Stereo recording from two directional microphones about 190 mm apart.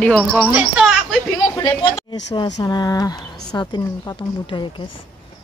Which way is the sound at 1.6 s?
25° left (ahead or behind).